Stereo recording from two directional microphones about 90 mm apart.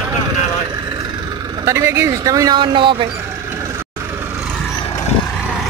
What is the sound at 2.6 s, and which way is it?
Speech, 65° right (ahead or behind).